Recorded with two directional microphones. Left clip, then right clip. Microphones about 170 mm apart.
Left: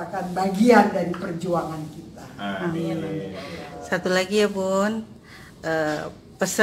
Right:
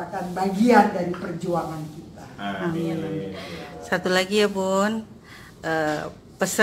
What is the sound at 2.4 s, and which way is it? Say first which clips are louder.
Speech: even; 20° right (ahead or behind).